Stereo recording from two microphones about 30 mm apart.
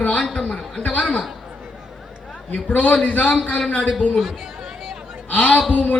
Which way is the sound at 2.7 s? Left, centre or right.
Left.